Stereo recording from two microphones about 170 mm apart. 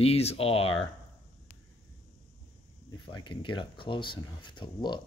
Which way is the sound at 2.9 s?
25° left (ahead or behind).